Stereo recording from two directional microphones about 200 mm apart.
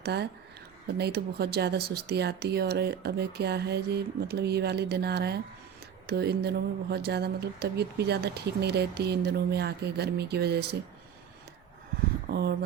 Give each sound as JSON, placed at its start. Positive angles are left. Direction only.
{"t": 0.0, "sound": "speech", "side_deg": -55}
{"t": 12.3, "sound": "speech", "side_deg": -55}